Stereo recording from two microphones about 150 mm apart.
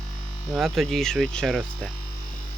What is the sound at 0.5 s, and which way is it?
Speech, centre (ahead or behind).